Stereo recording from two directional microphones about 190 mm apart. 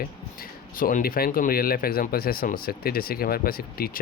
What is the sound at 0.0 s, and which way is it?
Speech, 50° left (ahead or behind).